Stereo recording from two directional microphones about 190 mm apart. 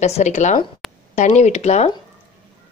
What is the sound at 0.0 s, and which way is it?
A woman's voice, 35° left (ahead or behind).